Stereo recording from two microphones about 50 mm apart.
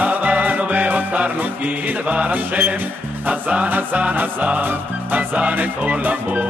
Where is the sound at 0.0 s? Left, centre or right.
Right.